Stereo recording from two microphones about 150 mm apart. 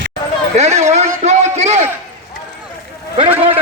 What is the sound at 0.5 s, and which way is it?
A man's voice, 50° right (ahead or behind).